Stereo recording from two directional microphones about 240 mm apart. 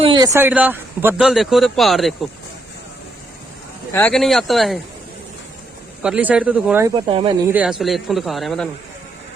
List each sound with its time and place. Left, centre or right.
0.0 s a sound: centre
0.3 s speech: centre
3.9 s speech: centre
6.0 s speech: centre